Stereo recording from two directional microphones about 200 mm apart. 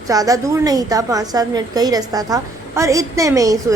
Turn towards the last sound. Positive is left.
turn(degrees=-15)  # may be behind; listen again after turning